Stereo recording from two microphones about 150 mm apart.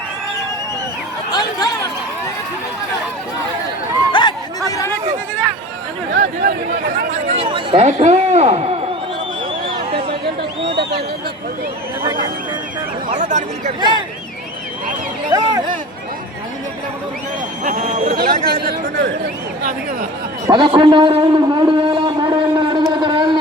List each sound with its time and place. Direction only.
1.3 s a sound: 25° left (ahead or behind)
4.1 s chatter: 30° left (ahead or behind)
6.1 s speech: 80° right
7.1 s speech: 40° right (ahead or behind)
9.9 s a sound: 50° right (ahead or behind)
13.1 s speech: 50° right (ahead or behind)
15.3 s speech: 25° right (ahead or behind)
17.6 s speech: 60° right (ahead or behind)
18.4 s speech: 90° right
20.5 s a man's voice: 30° right (ahead or behind)